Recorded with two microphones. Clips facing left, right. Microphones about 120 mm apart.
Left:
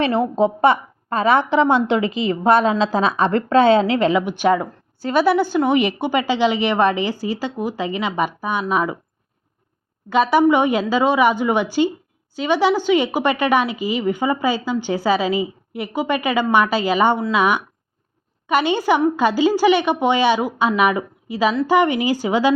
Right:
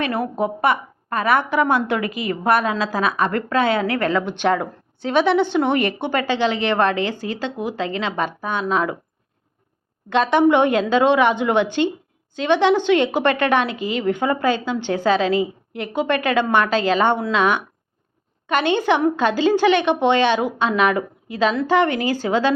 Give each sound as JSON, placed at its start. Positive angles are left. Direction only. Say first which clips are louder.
{"t": 0.0, "sound": "a woman's voice", "louder": "left 4 dB", "side_deg": 25}
{"t": 10.1, "sound": "a woman's voice", "louder": "left 1 dB", "side_deg": 5}